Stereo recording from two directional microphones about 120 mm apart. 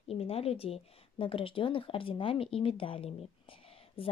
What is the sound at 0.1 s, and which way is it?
Speech, 55° left (ahead or behind).